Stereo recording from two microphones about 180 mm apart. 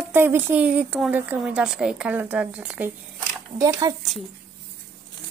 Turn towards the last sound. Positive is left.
turn(degrees=-20)  # may be behind; listen again after turning